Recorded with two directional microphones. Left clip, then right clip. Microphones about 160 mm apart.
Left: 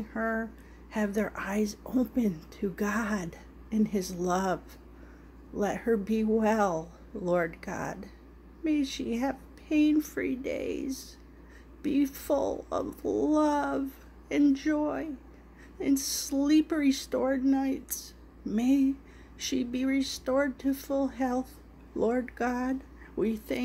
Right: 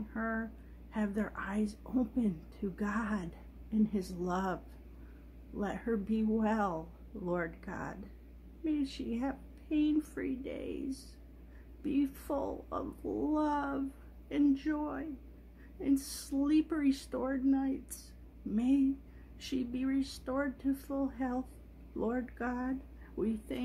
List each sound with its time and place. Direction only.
0.1 s speech: 20° left (ahead or behind)
5.6 s speech: 15° left (ahead or behind)